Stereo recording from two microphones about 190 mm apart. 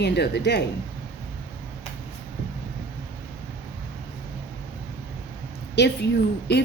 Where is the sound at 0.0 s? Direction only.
60° left (ahead or behind).